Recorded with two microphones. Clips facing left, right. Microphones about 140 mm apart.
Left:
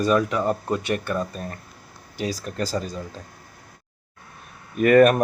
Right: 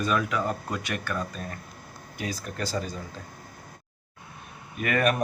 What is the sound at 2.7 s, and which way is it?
Speech, 40° left (ahead or behind).